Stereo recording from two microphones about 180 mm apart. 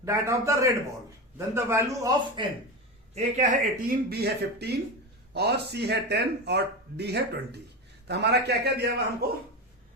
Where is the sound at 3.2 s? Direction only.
45° right (ahead or behind).